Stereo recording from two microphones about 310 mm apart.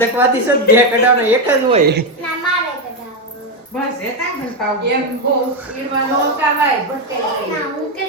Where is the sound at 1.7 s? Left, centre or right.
Right.